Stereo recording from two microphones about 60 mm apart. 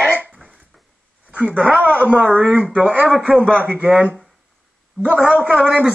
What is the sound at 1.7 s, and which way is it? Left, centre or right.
Speech, left.